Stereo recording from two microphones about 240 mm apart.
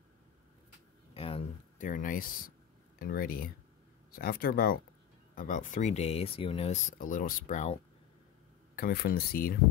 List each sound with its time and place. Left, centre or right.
1.1 s speech: left
8.7 s speech: left